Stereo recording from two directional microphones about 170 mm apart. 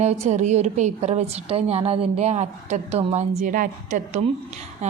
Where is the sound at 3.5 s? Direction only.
50° right (ahead or behind).